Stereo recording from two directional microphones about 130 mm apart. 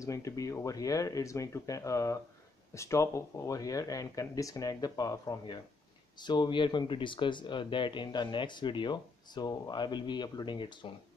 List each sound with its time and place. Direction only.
0.0 s speech: 25° left (ahead or behind)